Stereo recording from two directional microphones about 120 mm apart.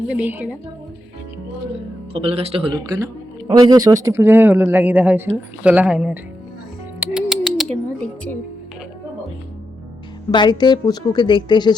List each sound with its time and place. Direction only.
0.1 s speech: 15° right (ahead or behind)
2.1 s speech: 55° right (ahead or behind)
2.9 s speech: 35° right (ahead or behind); by 6.1 s 5° right (ahead or behind)
7.0 s music: 5° right (ahead or behind)
7.7 s a sound: 10° left (ahead or behind)
10.3 s a woman's voice: 40° left (ahead or behind)